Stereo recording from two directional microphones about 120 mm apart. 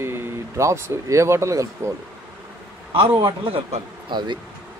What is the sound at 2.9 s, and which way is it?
A man's voice, 50° right (ahead or behind).